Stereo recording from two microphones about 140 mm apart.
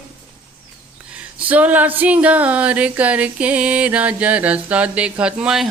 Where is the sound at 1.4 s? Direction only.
10° right (ahead or behind).